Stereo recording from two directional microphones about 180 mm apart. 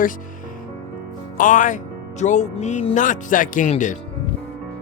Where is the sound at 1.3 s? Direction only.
45° left (ahead or behind).